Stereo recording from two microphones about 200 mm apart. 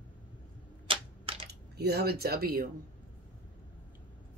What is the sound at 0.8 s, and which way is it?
Typewriter, 25° right (ahead or behind).